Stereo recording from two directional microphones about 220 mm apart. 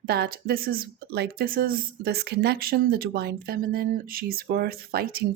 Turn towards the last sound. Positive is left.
turn(degrees=-45)  # may be behind; listen again after turning